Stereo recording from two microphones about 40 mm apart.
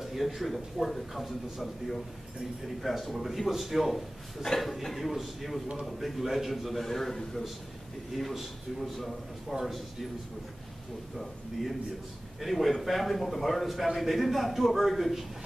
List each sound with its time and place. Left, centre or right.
0.0 s a man's voice: centre
12.4 s a man's voice: centre